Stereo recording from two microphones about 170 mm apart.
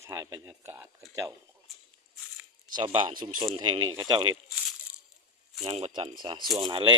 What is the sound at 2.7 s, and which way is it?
Speech, 30° right (ahead or behind).